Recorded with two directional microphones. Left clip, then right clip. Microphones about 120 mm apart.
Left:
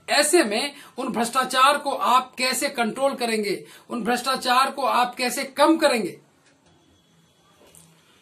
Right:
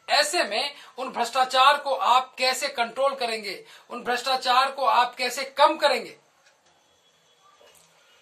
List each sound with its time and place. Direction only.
0.0 s speech: 30° left (ahead or behind)